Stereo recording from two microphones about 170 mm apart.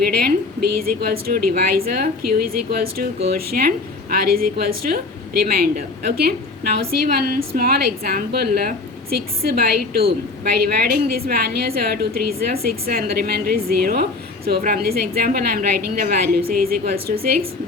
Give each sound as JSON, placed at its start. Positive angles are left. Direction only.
{"t": 0.0, "sound": "a woman's voice", "side_deg": -60}